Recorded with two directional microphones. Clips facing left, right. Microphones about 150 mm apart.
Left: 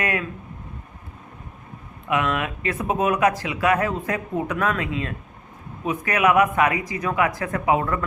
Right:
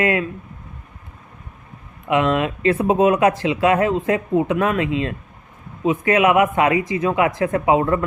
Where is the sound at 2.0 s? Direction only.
30° right (ahead or behind).